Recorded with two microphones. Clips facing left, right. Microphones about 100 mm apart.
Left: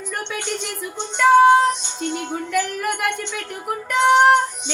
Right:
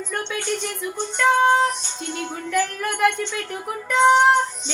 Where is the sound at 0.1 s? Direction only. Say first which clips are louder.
Right 1 dB; 15° left (ahead or behind).